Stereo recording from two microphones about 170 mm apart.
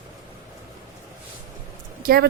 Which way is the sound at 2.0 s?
65° right (ahead or behind).